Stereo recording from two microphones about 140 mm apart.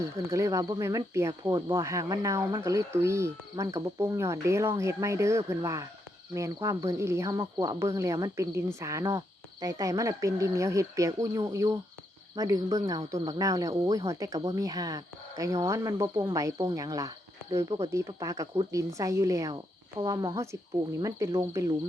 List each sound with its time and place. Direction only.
0.0 s speech: 20° right (ahead or behind)